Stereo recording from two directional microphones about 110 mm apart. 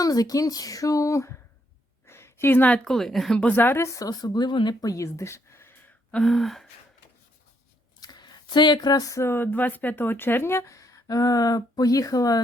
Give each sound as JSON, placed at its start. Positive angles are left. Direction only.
{"t": 0.0, "sound": "a woman's voice", "side_deg": 35}
{"t": 3.4, "sound": "speech", "side_deg": 20}
{"t": 6.1, "sound": "gasp", "side_deg": 5}
{"t": 8.0, "sound": "speech", "side_deg": 40}